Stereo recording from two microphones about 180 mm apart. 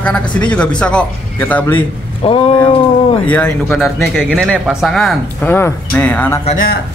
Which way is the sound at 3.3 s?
5° left (ahead or behind).